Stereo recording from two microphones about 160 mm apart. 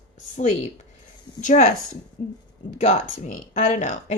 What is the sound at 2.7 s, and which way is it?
Speech, 50° left (ahead or behind).